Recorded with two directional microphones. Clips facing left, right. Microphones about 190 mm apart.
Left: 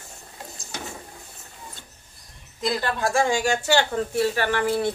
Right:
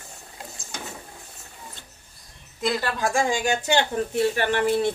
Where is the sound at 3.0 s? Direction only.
15° right (ahead or behind).